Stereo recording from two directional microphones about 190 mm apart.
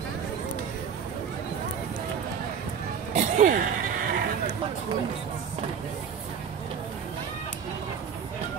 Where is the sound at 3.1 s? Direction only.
40° right (ahead or behind).